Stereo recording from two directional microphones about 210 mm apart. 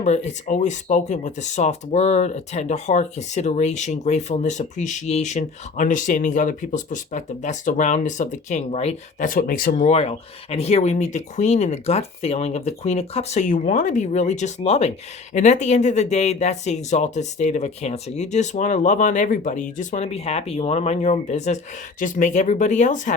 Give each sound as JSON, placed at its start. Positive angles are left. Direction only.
{"t": 0.0, "sound": "speech", "side_deg": 35}